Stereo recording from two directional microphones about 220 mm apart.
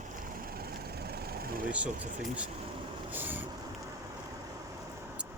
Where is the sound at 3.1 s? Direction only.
10° right (ahead or behind).